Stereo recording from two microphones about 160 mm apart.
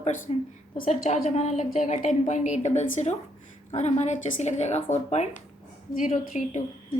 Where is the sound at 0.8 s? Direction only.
55° left (ahead or behind).